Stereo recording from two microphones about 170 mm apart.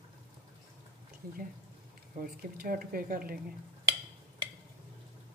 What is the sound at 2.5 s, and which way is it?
Speech, 60° right (ahead or behind).